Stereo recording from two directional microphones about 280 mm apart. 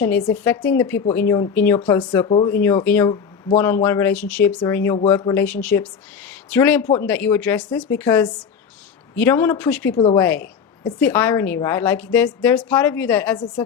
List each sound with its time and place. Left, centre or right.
0.3 s a woman's voice: centre
9.9 s a woman's voice: centre
10.2 s a woman's voice: centre